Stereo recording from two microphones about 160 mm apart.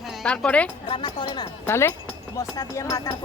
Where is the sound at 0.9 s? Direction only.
30° left (ahead or behind).